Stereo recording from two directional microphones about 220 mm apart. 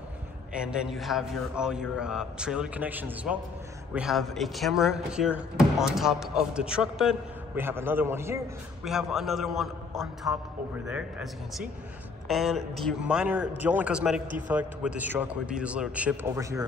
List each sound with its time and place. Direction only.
0.5 s a man's voice: 5° right (ahead or behind)